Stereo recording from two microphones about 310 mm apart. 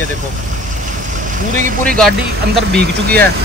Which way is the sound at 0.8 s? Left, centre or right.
Right.